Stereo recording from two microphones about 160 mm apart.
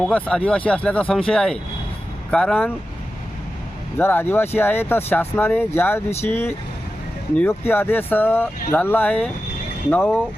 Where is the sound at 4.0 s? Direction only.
15° left (ahead or behind).